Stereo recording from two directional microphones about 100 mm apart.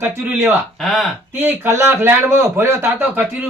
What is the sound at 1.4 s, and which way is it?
A man's voice, 25° right (ahead or behind).